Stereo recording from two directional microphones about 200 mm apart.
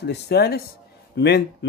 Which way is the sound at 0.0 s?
55° left (ahead or behind).